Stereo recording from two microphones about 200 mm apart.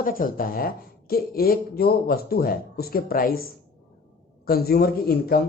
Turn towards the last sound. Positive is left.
turn(degrees=50)  # may be behind; listen again after turning